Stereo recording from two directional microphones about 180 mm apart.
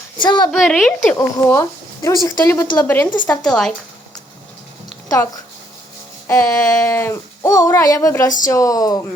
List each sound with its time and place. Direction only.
0.2 s speech: 25° left (ahead or behind)
0.5 s a woman's voice: centre (ahead or behind)
1.1 s a sound: 15° left (ahead or behind)
3.2 s a woman's voice: 5° left (ahead or behind)
5.0 s speech: 20° left (ahead or behind)
6.2 s a sound: 20° left (ahead or behind)
8.4 s speech: 20° left (ahead or behind)